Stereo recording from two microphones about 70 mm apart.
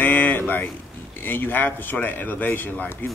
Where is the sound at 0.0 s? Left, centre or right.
Left.